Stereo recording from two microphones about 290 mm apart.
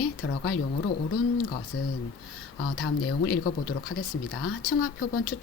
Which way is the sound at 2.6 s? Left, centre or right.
Left.